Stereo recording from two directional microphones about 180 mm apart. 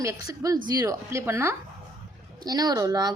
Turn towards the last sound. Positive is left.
turn(degrees=-20)  # may be behind; listen again after turning